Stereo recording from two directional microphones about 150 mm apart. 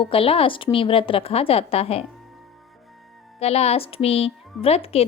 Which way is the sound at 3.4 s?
45° left (ahead or behind).